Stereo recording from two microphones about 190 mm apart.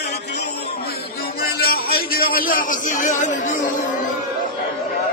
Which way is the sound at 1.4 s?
55° left (ahead or behind).